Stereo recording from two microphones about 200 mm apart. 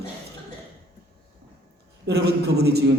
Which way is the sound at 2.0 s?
55° right (ahead or behind).